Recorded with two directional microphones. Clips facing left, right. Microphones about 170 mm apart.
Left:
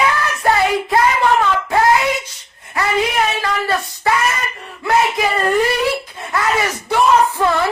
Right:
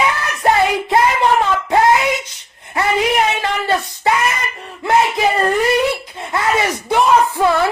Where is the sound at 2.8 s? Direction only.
25° right (ahead or behind).